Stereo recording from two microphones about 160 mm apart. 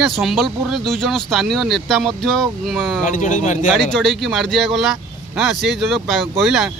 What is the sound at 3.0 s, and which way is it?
Speech, 50° left (ahead or behind).